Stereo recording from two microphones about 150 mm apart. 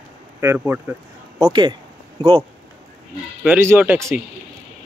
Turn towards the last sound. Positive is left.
turn(degrees=-15)  # may be behind; listen again after turning